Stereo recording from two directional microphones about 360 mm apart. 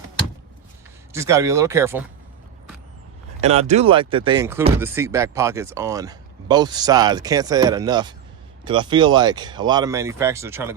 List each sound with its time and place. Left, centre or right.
1.1 s speech: centre
3.4 s speech: centre